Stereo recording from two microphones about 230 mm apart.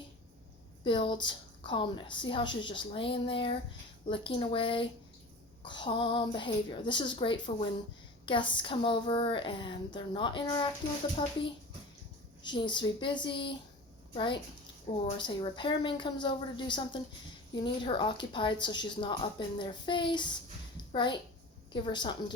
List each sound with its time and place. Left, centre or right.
0.9 s a woman's voice: left
12.5 s a woman's voice: centre